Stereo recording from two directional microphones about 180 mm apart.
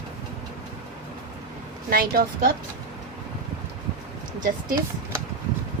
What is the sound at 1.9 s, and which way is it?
Speech, 55° right (ahead or behind).